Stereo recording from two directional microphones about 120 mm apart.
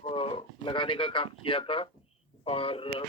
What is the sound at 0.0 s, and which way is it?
Speech, 50° left (ahead or behind).